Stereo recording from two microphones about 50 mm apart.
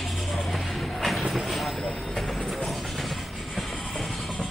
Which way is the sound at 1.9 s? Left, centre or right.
Centre.